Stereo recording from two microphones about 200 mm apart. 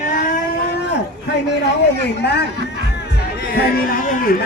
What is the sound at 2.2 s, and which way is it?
Speech, 55° left (ahead or behind).